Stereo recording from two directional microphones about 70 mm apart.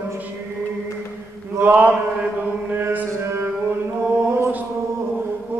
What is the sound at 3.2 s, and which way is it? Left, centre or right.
Music, right.